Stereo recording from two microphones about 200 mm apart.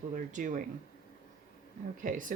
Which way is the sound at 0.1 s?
40° right (ahead or behind).